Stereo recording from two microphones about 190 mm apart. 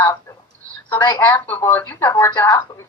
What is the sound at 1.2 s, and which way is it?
A woman's voice, 10° left (ahead or behind).